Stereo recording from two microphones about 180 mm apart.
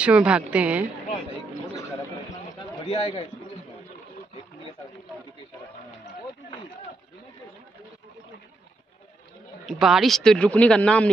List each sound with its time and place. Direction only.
0.0 s speech: 5° right (ahead or behind)
2.8 s a man's voice: 30° left (ahead or behind)
9.7 s speech: centre (ahead or behind)